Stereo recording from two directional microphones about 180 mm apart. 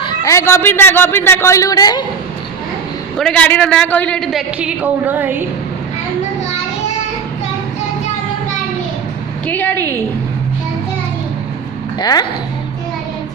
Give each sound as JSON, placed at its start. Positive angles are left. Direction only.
{"t": 0.0, "sound": "a man's voice", "side_deg": 20}
{"t": 3.2, "sound": "a man's voice", "side_deg": 5}
{"t": 9.5, "sound": "a man's voice", "side_deg": 10}
{"t": 11.9, "sound": "speech", "side_deg": 20}